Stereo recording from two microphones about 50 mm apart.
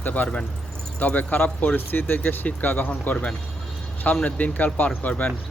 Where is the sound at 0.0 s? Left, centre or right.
Left.